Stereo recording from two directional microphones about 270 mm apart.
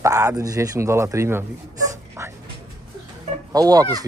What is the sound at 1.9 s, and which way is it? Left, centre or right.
Dog, centre.